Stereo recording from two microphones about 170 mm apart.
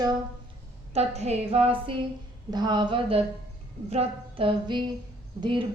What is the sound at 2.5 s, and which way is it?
Speech, 25° right (ahead or behind).